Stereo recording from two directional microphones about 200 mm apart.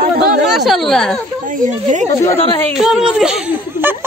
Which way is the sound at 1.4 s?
40° right (ahead or behind).